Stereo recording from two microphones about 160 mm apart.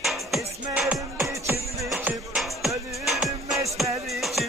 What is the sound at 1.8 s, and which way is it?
Music, 5° right (ahead or behind).